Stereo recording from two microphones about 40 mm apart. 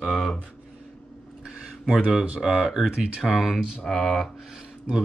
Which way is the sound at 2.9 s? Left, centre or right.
Right.